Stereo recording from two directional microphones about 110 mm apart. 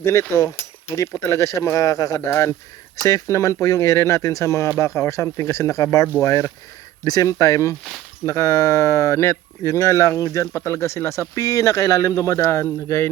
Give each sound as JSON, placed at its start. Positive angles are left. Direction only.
{"t": 0.0, "sound": "speech", "side_deg": 25}